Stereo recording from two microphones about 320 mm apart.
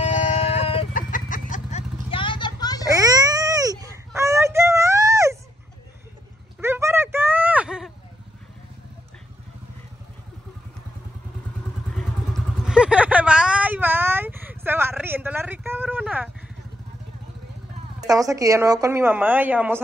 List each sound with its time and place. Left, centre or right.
0.0 s music: left
1.5 s vehicle: left
2.9 s baby cry: centre
6.6 s a sound: centre
12.6 s a sound: centre
18.0 s a woman's voice: centre